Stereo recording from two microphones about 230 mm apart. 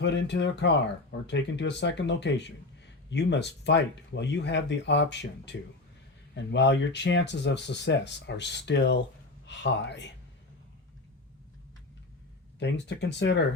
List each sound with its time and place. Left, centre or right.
0.0 s speech: left
12.5 s speech: left